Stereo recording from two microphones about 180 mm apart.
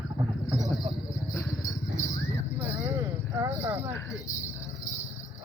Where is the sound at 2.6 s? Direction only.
15° right (ahead or behind).